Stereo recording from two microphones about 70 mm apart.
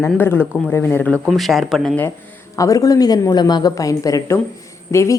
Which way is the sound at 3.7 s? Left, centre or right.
Left.